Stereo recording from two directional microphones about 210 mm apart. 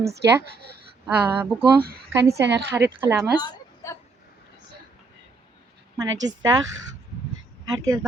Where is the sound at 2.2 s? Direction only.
55° right (ahead or behind).